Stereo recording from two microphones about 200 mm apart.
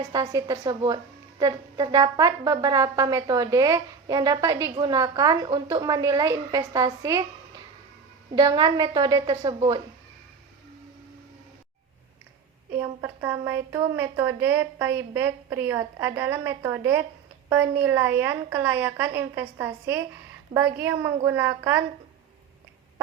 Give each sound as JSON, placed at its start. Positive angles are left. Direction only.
{"t": 0.1, "sound": "a woman's voice", "side_deg": -20}
{"t": 12.7, "sound": "a woman's voice", "side_deg": -10}